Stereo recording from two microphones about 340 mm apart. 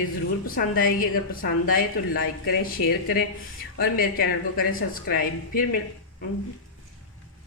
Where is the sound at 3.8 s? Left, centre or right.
Left.